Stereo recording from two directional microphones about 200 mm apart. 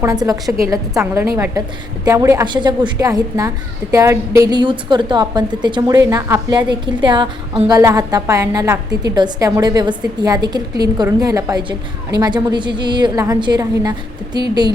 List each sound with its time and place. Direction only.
0.0 s a woman's voice: 20° right (ahead or behind)